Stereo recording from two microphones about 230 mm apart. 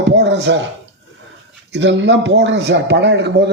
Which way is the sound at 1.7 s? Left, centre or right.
Right.